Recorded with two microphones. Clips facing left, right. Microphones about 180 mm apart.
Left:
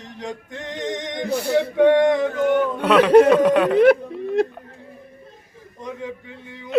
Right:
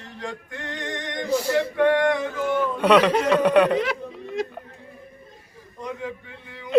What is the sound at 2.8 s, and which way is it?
Speech, centre (ahead or behind).